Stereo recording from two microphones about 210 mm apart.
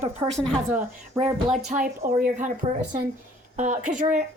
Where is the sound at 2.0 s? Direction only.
45° right (ahead or behind).